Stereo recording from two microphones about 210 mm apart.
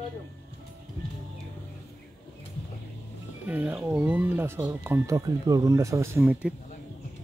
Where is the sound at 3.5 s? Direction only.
10° right (ahead or behind).